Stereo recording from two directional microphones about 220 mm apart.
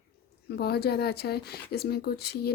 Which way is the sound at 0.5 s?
45° left (ahead or behind).